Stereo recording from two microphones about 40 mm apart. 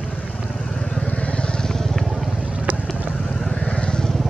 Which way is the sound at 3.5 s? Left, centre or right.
Left.